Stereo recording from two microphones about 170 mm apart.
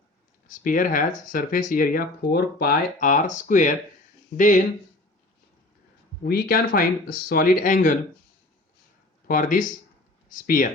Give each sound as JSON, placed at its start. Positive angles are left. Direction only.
{"t": 0.4, "sound": "speech", "side_deg": 50}
{"t": 6.2, "sound": "speech", "side_deg": 65}
{"t": 9.2, "sound": "speech", "side_deg": 55}